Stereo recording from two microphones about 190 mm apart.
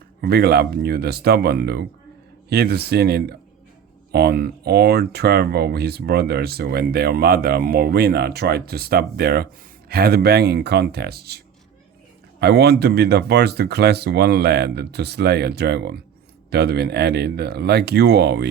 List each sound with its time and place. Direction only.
0.2 s speech: 55° right (ahead or behind)